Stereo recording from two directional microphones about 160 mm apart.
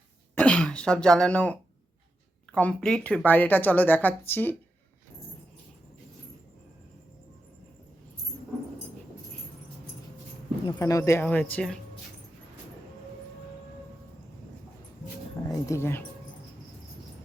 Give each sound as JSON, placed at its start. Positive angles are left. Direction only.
{"t": 0.3, "sound": "speech", "side_deg": 10}
{"t": 10.8, "sound": "speech", "side_deg": 20}
{"t": 15.4, "sound": "speech", "side_deg": 20}